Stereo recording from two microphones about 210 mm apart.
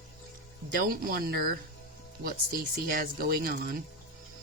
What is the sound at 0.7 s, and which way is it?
Speech, 45° right (ahead or behind).